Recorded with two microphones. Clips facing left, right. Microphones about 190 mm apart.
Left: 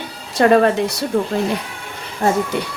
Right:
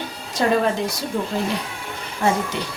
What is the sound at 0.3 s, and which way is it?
Speech, 65° left (ahead or behind).